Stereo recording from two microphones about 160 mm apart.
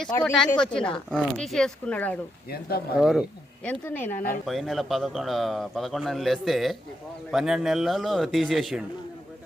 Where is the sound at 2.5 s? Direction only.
70° left (ahead or behind).